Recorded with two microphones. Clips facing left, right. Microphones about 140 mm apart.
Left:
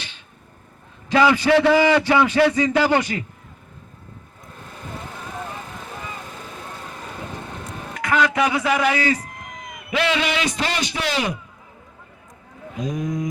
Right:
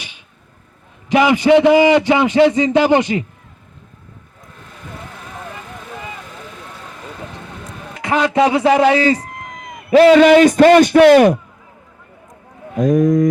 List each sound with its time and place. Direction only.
1.1 s a man's voice: 20° right (ahead or behind)
7.9 s speech: 25° right (ahead or behind)
9.7 s a man's voice: 40° right (ahead or behind); by 11.3 s 55° right (ahead or behind)
12.7 s a sound: 55° right (ahead or behind)